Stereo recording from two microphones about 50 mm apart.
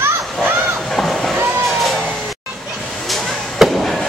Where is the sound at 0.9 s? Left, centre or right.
Centre.